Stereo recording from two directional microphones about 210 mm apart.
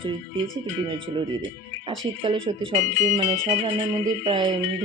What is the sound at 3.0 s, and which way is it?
Speech, 30° right (ahead or behind).